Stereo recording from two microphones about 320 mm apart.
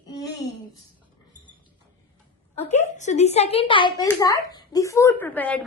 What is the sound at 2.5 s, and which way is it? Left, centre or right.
A woman's voice, centre.